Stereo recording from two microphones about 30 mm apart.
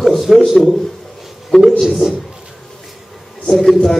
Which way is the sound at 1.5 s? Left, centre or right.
Left.